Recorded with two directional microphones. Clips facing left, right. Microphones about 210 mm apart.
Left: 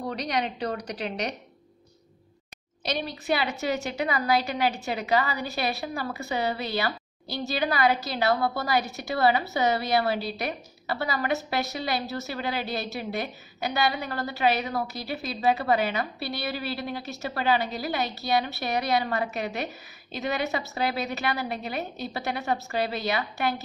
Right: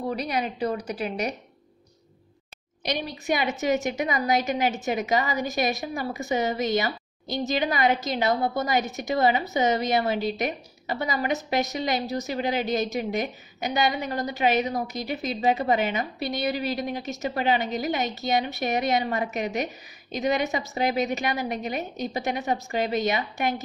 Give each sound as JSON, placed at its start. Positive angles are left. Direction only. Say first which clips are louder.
{"t": 0.1, "sound": "a woman's voice", "louder": "right 1 dB", "side_deg": -10}
{"t": 2.8, "sound": "a woman's voice", "louder": "right 1 dB", "side_deg": -15}